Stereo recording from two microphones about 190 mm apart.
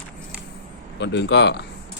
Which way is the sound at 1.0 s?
65° left (ahead or behind).